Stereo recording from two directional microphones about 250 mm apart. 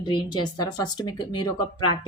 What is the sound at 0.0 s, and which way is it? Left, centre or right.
Speech, centre.